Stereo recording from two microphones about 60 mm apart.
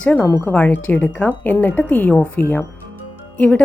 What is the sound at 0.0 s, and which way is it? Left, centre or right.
A woman's voice, left.